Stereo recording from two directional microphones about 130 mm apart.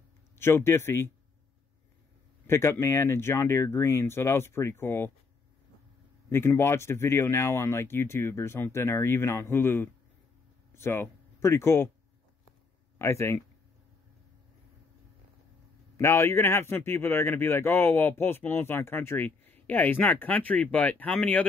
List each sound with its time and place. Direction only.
0.4 s speech: 20° left (ahead or behind)
2.4 s speech: 20° left (ahead or behind)
6.3 s speech: 20° left (ahead or behind)
13.0 s speech: 20° left (ahead or behind)
16.0 s speech: 20° left (ahead or behind)